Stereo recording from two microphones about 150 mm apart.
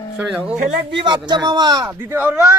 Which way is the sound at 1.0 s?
30° right (ahead or behind).